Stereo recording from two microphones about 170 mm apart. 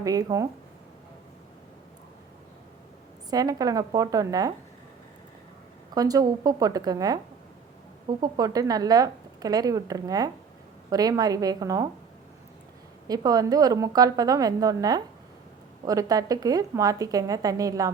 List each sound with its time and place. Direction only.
0.0 s a woman's voice: 20° right (ahead or behind)
3.2 s a woman's voice: 20° right (ahead or behind)
5.9 s a woman's voice: 20° right (ahead or behind)
8.2 s a woman's voice: 20° right (ahead or behind)
13.1 s a woman's voice: 20° right (ahead or behind)